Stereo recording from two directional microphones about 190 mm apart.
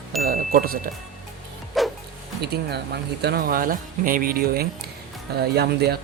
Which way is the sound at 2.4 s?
60° right (ahead or behind).